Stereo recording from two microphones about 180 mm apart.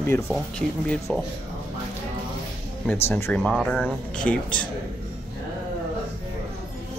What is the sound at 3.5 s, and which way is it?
Speech, 5° right (ahead or behind).